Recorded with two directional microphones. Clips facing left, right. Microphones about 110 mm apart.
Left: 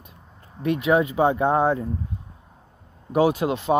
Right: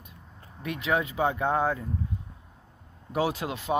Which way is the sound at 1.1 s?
30° left (ahead or behind).